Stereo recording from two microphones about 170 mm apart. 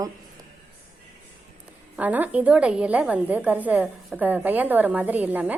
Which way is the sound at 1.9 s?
10° right (ahead or behind).